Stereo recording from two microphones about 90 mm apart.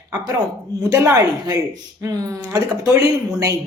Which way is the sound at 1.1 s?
40° right (ahead or behind).